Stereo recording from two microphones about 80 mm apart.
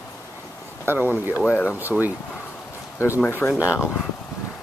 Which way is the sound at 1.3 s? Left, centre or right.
Left.